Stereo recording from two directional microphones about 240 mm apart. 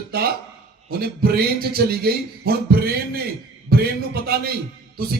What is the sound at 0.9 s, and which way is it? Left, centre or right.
Speech, right.